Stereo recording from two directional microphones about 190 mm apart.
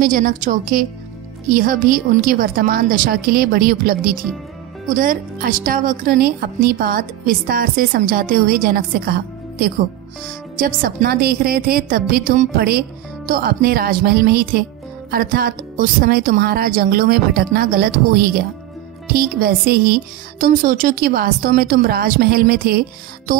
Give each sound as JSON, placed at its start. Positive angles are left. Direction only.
{"t": 0.0, "sound": "speech", "side_deg": -45}